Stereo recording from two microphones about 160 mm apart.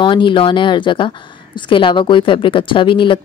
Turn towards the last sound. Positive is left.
turn(degrees=30)  # may be behind; listen again after turning